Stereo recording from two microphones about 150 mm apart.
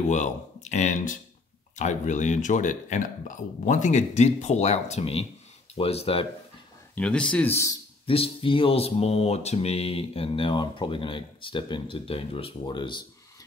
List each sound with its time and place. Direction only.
0.1 s speech: 50° left (ahead or behind)
5.8 s mantra: 40° left (ahead or behind)
7.0 s speech: 5° left (ahead or behind)
8.1 s mantra: 40° left (ahead or behind)